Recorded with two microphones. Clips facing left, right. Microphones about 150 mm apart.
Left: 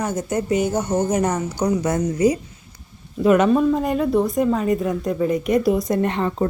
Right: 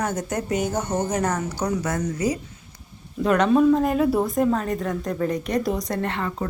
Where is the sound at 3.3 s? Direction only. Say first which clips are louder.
Left 2 dB; 5° left (ahead or behind).